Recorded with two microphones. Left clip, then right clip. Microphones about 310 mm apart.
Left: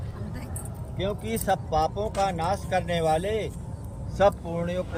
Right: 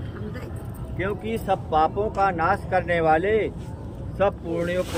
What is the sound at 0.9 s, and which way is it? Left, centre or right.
Speech, left.